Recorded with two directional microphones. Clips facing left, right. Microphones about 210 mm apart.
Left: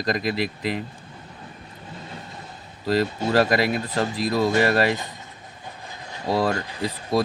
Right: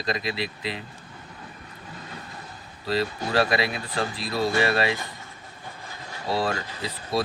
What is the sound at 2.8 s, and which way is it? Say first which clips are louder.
Speech: left 4 dB; 45° left (ahead or behind).